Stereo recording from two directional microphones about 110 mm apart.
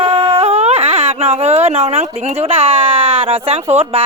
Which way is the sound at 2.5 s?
65° right (ahead or behind).